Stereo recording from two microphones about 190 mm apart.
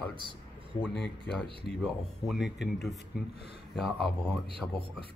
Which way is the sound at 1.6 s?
Centre (ahead or behind).